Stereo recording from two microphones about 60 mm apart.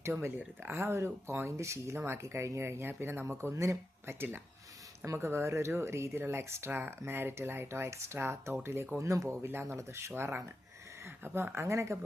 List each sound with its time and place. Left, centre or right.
0.0 s speech: right
6.7 s speech: right